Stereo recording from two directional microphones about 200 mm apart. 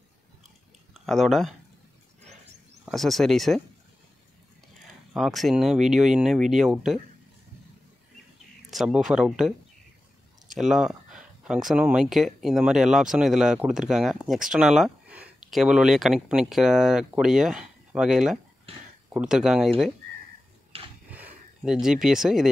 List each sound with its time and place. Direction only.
0.9 s speech: centre (ahead or behind)
2.8 s speech: centre (ahead or behind)
5.1 s speech: centre (ahead or behind)
8.6 s speech: 5° right (ahead or behind)
10.5 s speech: centre (ahead or behind)
20.7 s a sound: 30° right (ahead or behind)
21.1 s a sound: 5° right (ahead or behind)